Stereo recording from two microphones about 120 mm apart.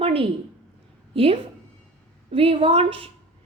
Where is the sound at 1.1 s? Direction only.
50° right (ahead or behind).